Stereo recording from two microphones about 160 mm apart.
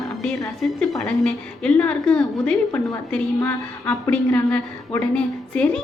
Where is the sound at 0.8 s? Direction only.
5° left (ahead or behind).